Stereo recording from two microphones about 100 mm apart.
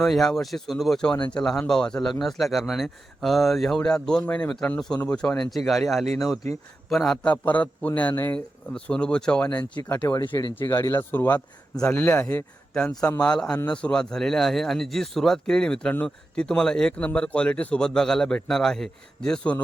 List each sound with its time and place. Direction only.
0.0 s speech: 5° left (ahead or behind); by 8.4 s 25° left (ahead or behind)
8.7 s speech: 10° left (ahead or behind)
13.2 s speech: 10° left (ahead or behind)